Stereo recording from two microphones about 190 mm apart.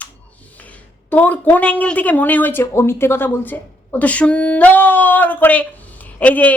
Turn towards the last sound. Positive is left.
turn(degrees=10)  # may be behind; listen again after turning